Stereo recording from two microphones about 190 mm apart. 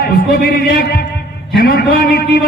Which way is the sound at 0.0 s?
50° left (ahead or behind).